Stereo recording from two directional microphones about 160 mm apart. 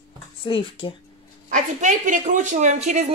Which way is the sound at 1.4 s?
50° right (ahead or behind).